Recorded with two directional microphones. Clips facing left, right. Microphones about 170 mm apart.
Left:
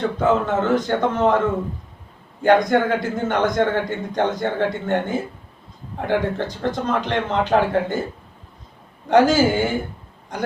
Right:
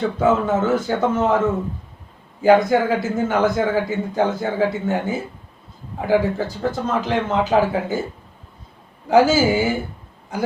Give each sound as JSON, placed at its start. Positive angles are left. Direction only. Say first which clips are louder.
{"t": 0.2, "sound": "a man's voice", "louder": "right 2 dB", "side_deg": -5}
{"t": 9.0, "sound": "a man's voice", "louder": "even", "side_deg": -5}